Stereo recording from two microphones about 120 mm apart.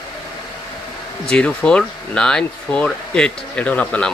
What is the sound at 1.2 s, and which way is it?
Speech, 10° left (ahead or behind).